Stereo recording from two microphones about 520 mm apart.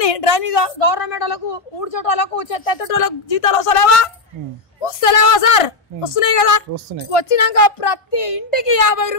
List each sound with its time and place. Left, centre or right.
0.0 s a woman's voice: left